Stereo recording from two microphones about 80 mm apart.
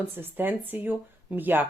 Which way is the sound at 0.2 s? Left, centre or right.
Right.